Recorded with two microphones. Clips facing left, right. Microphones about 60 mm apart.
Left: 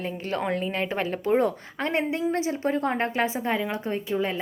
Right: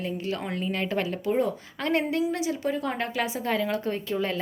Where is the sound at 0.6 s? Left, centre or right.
Left.